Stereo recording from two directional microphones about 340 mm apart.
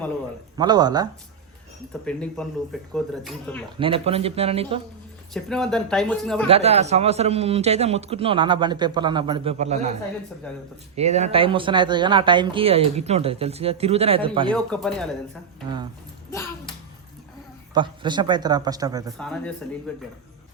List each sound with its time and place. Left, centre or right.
0.5 s speech: centre
1.9 s speech: centre
3.8 s speech: centre
5.3 s speech: centre
6.5 s speech: centre
10.5 s speech: centre
10.9 s speech: centre
14.5 s speech: centre
16.3 s a sound: centre
17.7 s speech: centre
19.1 s speech: centre